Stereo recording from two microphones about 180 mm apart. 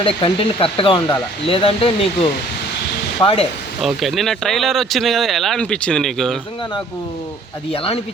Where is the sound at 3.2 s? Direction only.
20° left (ahead or behind).